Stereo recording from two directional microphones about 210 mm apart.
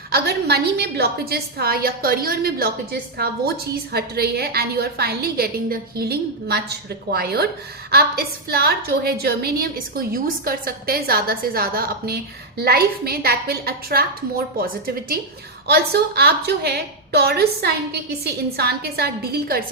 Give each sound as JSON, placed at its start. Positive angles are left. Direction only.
{"t": 0.1, "sound": "a woman's voice", "side_deg": -50}